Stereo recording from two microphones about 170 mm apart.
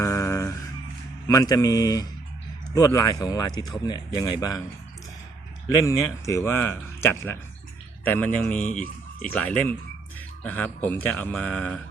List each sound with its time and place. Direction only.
0.0 s a sound: 15° left (ahead or behind)
1.3 s speech: 20° left (ahead or behind)
5.8 s speech: 15° left (ahead or behind)